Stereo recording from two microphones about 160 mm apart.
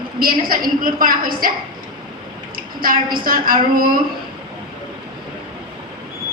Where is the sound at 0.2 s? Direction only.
65° right (ahead or behind).